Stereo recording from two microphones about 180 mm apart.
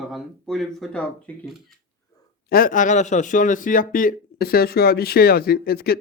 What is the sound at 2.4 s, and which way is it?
A man's voice, 50° left (ahead or behind).